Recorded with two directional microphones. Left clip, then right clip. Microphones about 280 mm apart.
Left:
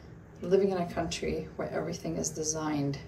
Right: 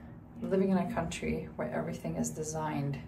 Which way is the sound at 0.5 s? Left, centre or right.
Centre.